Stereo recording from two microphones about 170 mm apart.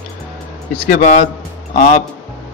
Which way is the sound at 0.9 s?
45° left (ahead or behind).